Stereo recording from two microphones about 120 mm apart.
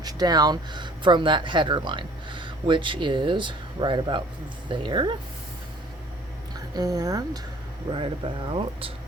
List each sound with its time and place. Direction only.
0.0 s speech: 35° right (ahead or behind)
6.7 s speech: 30° right (ahead or behind)
7.9 s speech: 45° right (ahead or behind)